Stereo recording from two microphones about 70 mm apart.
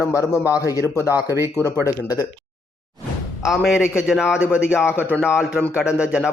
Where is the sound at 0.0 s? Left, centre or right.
Left.